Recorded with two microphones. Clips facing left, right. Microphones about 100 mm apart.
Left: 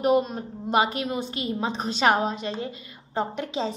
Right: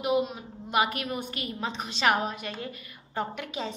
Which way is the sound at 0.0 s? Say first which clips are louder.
Left 5 dB; 40° left (ahead or behind).